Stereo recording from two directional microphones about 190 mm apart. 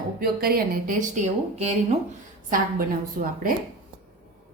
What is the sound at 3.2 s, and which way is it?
Speech, 45° right (ahead or behind).